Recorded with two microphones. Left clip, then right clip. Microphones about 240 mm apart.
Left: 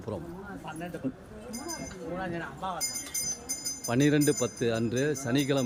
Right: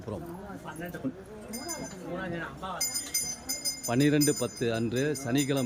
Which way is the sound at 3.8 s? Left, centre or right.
Centre.